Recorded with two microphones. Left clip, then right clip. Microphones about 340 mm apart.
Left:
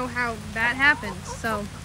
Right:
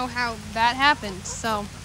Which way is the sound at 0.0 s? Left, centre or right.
Centre.